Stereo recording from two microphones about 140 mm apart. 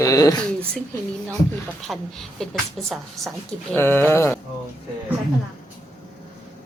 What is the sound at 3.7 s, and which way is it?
Speech, 15° left (ahead or behind).